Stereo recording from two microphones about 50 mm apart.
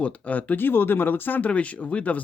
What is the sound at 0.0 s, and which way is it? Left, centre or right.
Speech, left.